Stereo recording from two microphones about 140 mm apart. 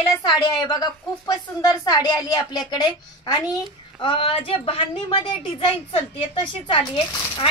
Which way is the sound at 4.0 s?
40° left (ahead or behind).